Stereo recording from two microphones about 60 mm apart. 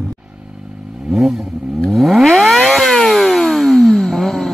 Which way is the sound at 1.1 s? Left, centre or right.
Centre.